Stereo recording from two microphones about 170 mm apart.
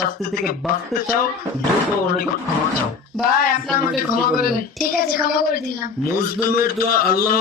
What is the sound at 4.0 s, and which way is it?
A man's voice, 60° left (ahead or behind).